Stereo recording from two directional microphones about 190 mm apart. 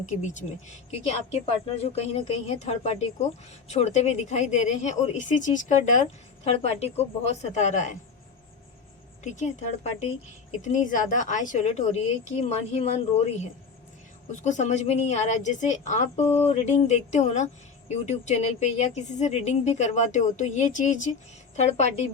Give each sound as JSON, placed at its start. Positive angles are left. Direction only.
{"t": 0.2, "sound": "a woman's voice", "side_deg": 40}
{"t": 9.2, "sound": "a woman's voice", "side_deg": 40}